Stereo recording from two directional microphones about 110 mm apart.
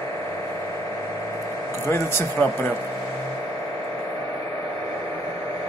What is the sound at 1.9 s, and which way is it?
Speech, 25° left (ahead or behind).